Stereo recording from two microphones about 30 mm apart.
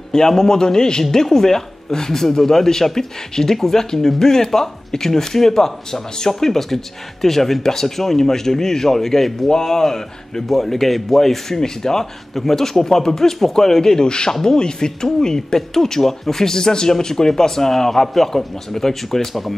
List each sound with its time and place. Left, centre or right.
0.1 s a man's voice: centre
1.1 s speech: centre